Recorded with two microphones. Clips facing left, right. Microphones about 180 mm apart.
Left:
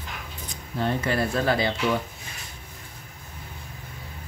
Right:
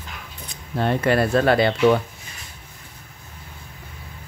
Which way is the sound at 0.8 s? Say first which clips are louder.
Right 5 dB; 65° right (ahead or behind).